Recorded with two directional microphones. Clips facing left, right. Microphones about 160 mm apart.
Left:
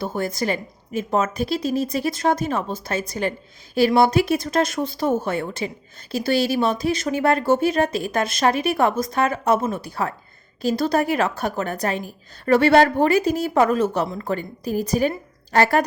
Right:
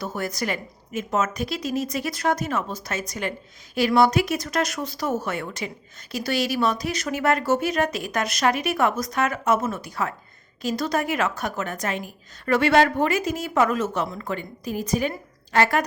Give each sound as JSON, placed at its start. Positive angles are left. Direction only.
{"t": 0.0, "sound": "a woman's voice", "side_deg": 25}